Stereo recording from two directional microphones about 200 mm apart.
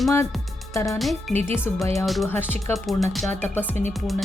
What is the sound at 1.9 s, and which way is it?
Speech, centre (ahead or behind).